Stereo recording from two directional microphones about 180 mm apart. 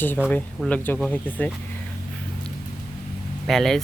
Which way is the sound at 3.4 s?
Centre (ahead or behind).